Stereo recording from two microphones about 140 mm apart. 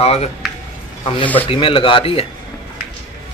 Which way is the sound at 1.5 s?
40° left (ahead or behind).